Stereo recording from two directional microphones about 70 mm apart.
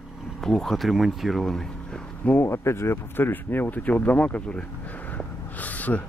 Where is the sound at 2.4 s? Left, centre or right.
Left.